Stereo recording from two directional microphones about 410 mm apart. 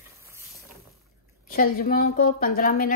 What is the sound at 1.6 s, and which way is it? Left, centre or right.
A woman's voice, centre.